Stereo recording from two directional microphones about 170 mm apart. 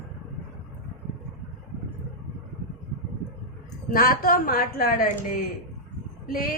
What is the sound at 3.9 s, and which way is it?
A woman's voice, 60° left (ahead or behind).